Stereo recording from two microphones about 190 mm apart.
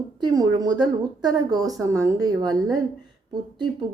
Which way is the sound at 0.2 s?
20° right (ahead or behind).